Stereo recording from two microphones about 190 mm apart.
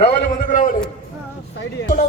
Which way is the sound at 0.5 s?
45° left (ahead or behind).